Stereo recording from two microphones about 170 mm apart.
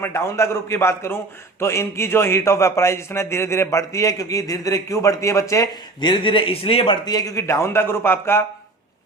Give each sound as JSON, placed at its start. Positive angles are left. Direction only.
{"t": 0.0, "sound": "a man's voice", "side_deg": 15}